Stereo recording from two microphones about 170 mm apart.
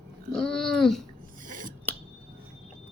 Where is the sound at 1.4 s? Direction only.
50° right (ahead or behind).